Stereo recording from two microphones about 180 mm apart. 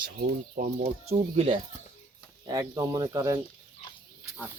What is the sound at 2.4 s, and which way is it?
Speech, 20° right (ahead or behind).